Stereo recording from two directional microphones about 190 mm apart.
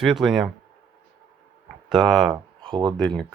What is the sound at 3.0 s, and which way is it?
Speech, 5° left (ahead or behind).